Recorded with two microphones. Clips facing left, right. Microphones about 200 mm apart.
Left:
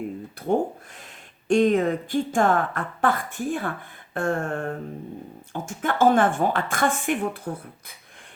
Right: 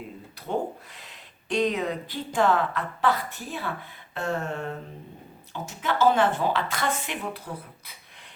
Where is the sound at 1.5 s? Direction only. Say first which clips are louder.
Left 6 dB; 50° left (ahead or behind).